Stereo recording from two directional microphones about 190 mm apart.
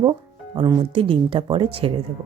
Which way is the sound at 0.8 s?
25° right (ahead or behind).